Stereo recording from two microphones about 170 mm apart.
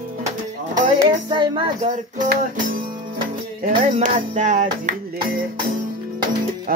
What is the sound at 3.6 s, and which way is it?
Music, 55° right (ahead or behind).